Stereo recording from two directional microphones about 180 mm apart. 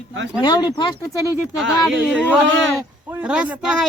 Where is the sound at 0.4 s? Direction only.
25° left (ahead or behind).